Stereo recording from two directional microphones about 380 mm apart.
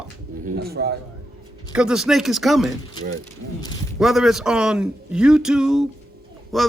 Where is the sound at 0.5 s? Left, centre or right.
Right.